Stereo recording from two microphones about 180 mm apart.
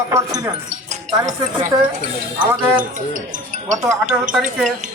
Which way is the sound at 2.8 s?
45° right (ahead or behind).